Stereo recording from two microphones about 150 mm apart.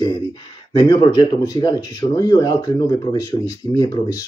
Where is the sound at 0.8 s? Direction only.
30° left (ahead or behind).